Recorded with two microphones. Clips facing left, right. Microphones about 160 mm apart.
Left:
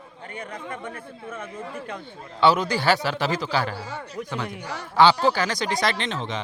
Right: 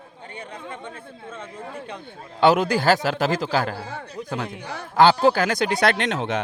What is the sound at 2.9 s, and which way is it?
Speech, 45° right (ahead or behind).